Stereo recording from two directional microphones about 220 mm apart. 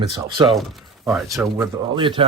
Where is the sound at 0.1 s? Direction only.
20° right (ahead or behind).